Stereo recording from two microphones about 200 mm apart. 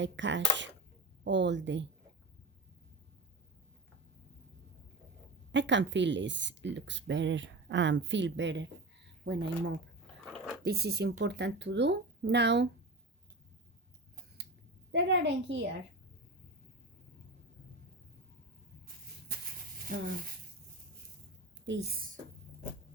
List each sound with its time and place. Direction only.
0.0 s speech: 65° right (ahead or behind)
5.5 s speech: 65° right (ahead or behind)
10.2 s a sound: centre (ahead or behind)
10.6 s speech: 55° right (ahead or behind)
14.9 s speech: 65° right (ahead or behind)
19.9 s speech: 45° right (ahead or behind)
21.7 s a woman's voice: 55° right (ahead or behind)